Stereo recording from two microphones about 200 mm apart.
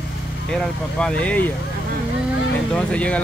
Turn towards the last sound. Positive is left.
turn(degrees=5)  # may be behind; listen again after turning